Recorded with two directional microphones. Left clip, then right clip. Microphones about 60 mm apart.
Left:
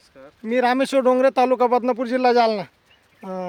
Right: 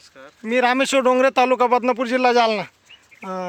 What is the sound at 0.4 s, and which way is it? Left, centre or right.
Speech, right.